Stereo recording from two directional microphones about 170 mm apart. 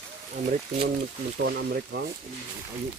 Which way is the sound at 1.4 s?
80° right.